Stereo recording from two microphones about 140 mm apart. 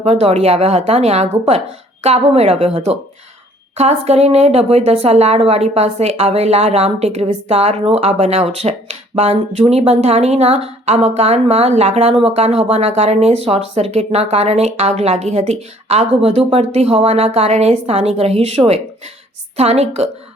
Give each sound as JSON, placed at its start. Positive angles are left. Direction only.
{"t": 0.0, "sound": "speech", "side_deg": -50}